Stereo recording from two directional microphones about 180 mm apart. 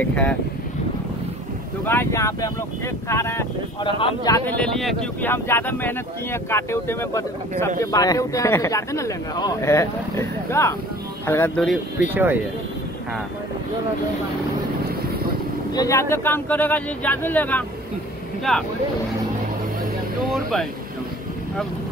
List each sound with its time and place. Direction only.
0.0 s speech: 5° left (ahead or behind)
1.9 s speech: 15° left (ahead or behind)
4.5 s speech: 5° left (ahead or behind)
12.1 s speech: 10° right (ahead or behind)
15.7 s speech: 20° left (ahead or behind); by 18.6 s centre (ahead or behind)
20.2 s speech: centre (ahead or behind)